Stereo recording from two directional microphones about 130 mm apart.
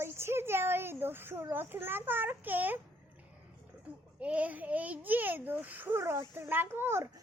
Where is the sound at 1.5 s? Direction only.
15° right (ahead or behind).